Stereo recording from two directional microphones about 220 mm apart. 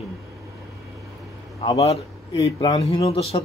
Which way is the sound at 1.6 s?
20° left (ahead or behind).